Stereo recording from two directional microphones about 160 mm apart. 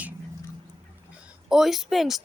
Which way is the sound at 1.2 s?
5° right (ahead or behind).